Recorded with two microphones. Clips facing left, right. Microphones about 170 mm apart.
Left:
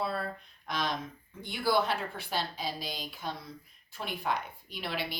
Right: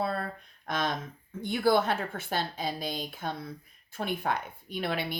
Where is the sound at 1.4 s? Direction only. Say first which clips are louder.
Right 4 dB; 50° right (ahead or behind).